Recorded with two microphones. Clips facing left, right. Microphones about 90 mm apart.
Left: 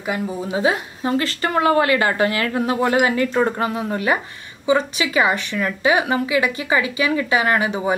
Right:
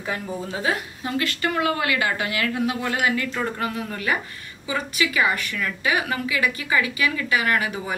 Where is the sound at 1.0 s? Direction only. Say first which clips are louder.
Left 5 dB; 30° left (ahead or behind).